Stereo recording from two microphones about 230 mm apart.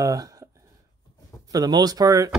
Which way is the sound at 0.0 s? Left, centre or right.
Centre.